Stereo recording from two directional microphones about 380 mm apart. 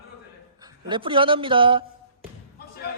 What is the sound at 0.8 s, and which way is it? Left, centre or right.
Speech, centre.